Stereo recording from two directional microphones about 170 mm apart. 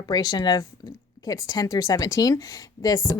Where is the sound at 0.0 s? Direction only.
25° left (ahead or behind).